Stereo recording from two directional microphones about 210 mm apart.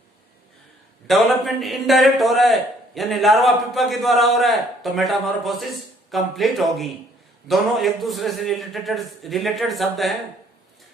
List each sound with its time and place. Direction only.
1.0 s a man's voice: centre (ahead or behind)